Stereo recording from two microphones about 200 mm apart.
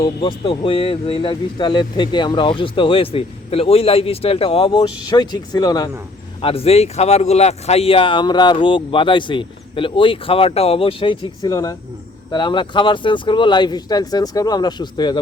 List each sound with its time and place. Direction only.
0.0 s speech: 30° left (ahead or behind)